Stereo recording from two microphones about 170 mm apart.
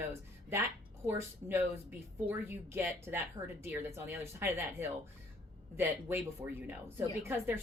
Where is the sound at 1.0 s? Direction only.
15° right (ahead or behind).